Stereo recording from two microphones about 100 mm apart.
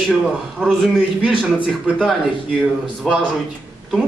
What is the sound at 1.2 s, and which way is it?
A man's voice, 5° right (ahead or behind).